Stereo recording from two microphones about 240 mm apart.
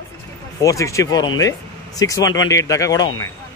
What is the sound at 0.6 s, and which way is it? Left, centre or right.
Speech, centre.